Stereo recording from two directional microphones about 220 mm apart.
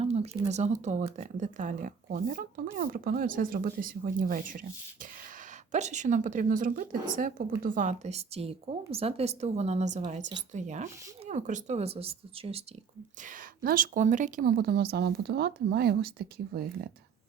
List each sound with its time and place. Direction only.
0.0 s speech: 30° right (ahead or behind)
5.7 s speech: 35° right (ahead or behind)
13.2 s speech: 40° right (ahead or behind)